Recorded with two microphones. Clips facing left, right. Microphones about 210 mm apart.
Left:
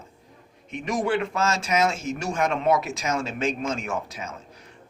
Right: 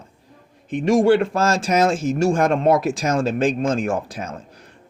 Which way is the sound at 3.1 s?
30° right (ahead or behind).